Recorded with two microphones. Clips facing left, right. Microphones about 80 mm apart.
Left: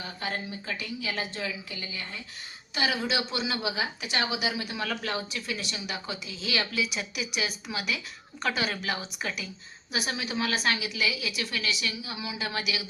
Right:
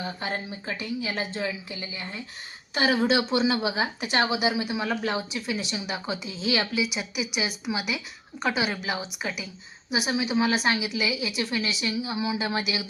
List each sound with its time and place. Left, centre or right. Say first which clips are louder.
0.0 s a woman's voice: right 3 dB; right
2.7 s a woman's voice: right 6 dB; right